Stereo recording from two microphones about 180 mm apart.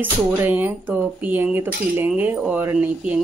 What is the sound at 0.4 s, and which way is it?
Speech, 10° right (ahead or behind).